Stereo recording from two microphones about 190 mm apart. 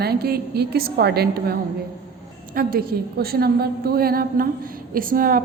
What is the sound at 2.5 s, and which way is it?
A woman's voice, 50° right (ahead or behind).